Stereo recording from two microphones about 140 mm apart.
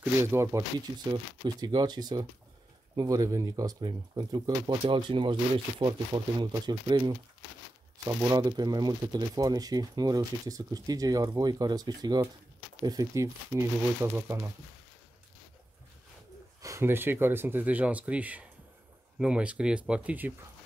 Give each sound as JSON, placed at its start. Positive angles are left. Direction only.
{"t": 0.2, "sound": "speech", "side_deg": -20}
{"t": 0.7, "sound": "speech", "side_deg": -30}
{"t": 16.6, "sound": "speech", "side_deg": -20}